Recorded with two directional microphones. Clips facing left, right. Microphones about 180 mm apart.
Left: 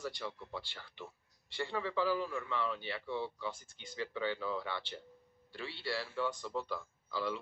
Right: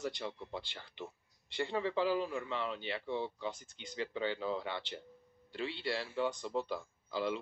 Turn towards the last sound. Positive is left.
turn(degrees=-20)  # may be behind; listen again after turning